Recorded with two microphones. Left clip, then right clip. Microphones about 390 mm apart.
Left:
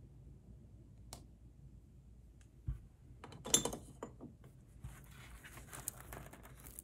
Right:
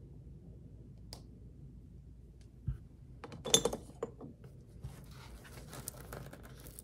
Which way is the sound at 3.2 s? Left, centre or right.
Right.